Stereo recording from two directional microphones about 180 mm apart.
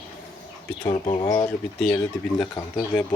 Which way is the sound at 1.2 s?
20° left (ahead or behind).